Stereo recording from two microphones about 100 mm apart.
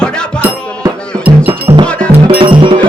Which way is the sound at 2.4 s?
60° right (ahead or behind).